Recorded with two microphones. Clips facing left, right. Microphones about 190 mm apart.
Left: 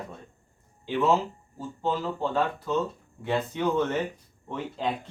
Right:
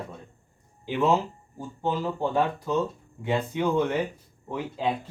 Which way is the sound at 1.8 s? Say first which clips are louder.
Right 1 dB; 15° right (ahead or behind).